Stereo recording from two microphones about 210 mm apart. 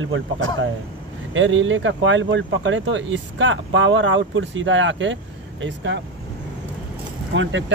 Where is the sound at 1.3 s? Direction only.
65° right (ahead or behind).